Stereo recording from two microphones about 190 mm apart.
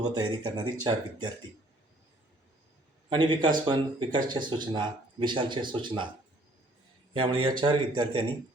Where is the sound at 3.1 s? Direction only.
25° right (ahead or behind).